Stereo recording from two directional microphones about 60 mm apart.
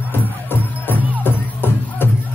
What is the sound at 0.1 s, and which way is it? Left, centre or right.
Music, left.